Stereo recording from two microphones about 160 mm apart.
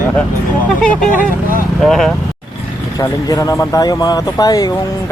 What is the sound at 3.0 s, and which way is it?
Speech, 20° left (ahead or behind).